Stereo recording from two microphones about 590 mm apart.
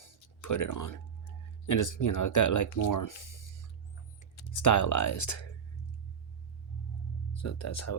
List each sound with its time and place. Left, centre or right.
0.4 s speech: left
4.5 s speech: left
7.3 s speech: left